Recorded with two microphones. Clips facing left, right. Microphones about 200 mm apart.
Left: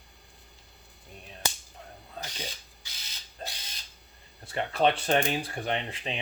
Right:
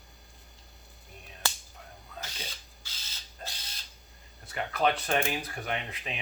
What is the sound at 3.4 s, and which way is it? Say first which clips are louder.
Mechanisms: left 3 dB; 25° left (ahead or behind).